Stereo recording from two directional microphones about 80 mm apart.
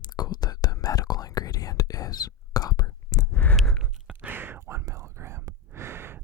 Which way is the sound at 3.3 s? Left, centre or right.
Left.